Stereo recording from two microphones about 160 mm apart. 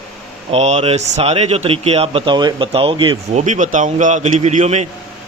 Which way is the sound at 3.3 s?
50° right (ahead or behind).